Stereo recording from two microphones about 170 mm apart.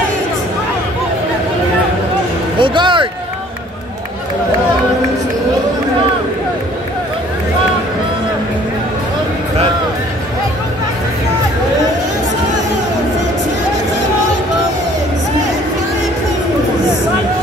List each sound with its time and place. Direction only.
2.6 s music: 30° right (ahead or behind)